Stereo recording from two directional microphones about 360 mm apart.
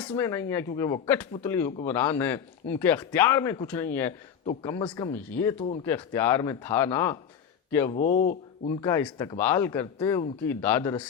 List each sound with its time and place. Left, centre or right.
0.1 s speech: centre
7.9 s speech: left
8.8 s speech: centre